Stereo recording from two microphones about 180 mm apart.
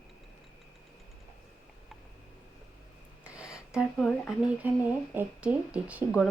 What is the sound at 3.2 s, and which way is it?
Speech, 5° right (ahead or behind).